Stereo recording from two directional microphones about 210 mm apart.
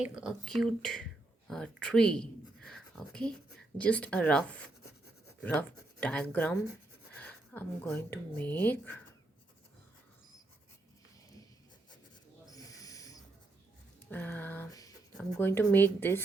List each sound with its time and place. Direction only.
0.0 s speech: 5° right (ahead or behind)
2.6 s writing: 5° left (ahead or behind)
3.8 s speech: 5° left (ahead or behind)
12.5 s a sound: 15° left (ahead or behind)
15.2 s a woman's voice: 10° left (ahead or behind)